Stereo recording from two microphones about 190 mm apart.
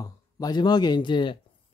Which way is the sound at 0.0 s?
20° left (ahead or behind).